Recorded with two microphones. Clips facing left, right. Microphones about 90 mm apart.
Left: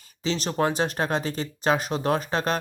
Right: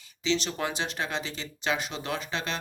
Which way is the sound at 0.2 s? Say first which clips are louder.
Left 4 dB; 40° left (ahead or behind).